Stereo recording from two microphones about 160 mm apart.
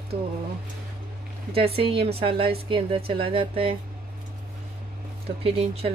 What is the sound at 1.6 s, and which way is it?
A woman's voice, 35° right (ahead or behind).